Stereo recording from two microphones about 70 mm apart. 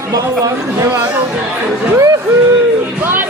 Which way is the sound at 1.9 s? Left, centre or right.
Right.